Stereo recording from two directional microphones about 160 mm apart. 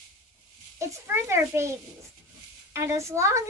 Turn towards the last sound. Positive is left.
turn(degrees=-15)  # may be behind; listen again after turning